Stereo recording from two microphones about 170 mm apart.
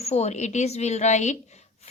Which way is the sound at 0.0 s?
40° left (ahead or behind).